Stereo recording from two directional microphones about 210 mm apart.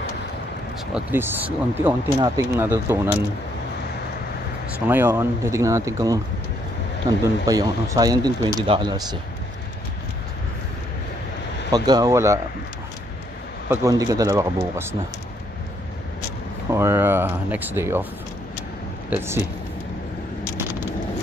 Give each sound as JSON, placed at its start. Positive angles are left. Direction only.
{"t": 1.1, "sound": "speech", "side_deg": -10}
{"t": 4.8, "sound": "speech", "side_deg": -10}
{"t": 11.7, "sound": "speech", "side_deg": -20}
{"t": 13.7, "sound": "speech", "side_deg": -15}
{"t": 16.7, "sound": "speech", "side_deg": -10}
{"t": 19.0, "sound": "speech", "side_deg": -10}